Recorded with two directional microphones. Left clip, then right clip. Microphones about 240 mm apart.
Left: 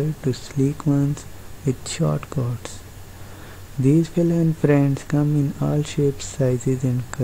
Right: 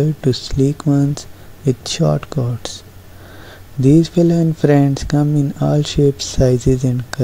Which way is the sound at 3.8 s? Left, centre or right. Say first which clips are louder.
Right 7 dB; centre.